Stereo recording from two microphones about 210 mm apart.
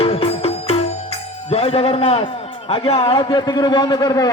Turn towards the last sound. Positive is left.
turn(degrees=15)  # may be behind; listen again after turning